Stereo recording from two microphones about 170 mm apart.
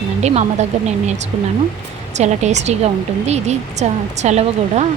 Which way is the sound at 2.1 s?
40° right (ahead or behind).